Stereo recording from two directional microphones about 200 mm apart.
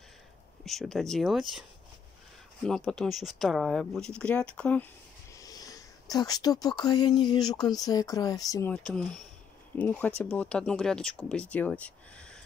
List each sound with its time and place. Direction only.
0.7 s speech: centre (ahead or behind)
2.6 s speech: 5° left (ahead or behind)
5.3 s speech: 20° left (ahead or behind)
8.7 s speech: 5° left (ahead or behind)